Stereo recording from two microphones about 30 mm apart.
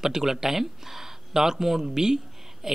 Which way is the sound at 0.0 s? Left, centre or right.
Centre.